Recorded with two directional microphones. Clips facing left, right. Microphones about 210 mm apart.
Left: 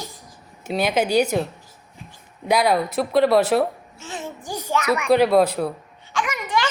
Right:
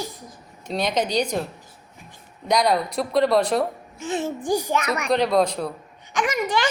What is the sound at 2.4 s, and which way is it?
Speech, 5° left (ahead or behind).